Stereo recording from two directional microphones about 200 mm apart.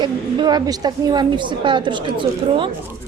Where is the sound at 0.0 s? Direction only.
20° right (ahead or behind).